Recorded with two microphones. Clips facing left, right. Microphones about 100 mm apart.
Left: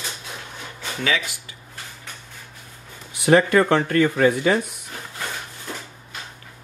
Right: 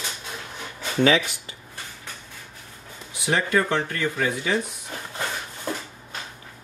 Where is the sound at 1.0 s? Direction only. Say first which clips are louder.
Right 6 dB; 30° right (ahead or behind).